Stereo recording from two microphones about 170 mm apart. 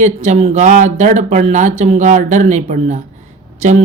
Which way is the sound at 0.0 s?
40° right (ahead or behind).